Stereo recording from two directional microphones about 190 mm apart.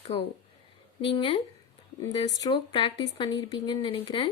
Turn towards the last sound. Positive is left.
turn(degrees=25)  # may be behind; listen again after turning